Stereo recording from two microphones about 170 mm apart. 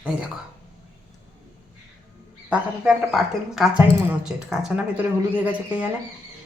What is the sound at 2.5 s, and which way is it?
A woman's voice, 5° right (ahead or behind).